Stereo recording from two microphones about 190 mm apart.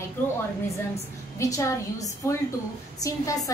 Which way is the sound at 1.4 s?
15° left (ahead or behind).